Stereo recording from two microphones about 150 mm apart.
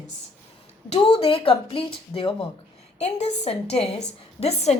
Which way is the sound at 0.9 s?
45° left (ahead or behind).